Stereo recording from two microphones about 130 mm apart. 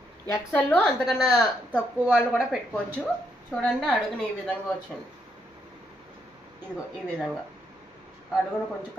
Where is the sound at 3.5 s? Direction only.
5° left (ahead or behind).